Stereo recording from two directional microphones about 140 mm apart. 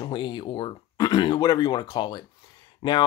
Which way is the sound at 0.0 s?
30° left (ahead or behind).